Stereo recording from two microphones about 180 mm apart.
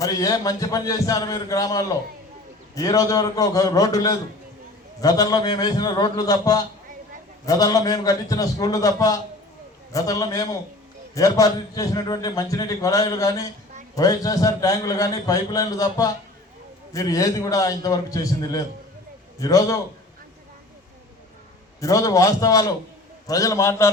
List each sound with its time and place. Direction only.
0.0 s a man's voice: 20° left (ahead or behind)
21.8 s a man's voice: 20° left (ahead or behind)